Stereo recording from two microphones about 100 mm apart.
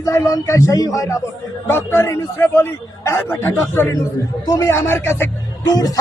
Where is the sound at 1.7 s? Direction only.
25° left (ahead or behind).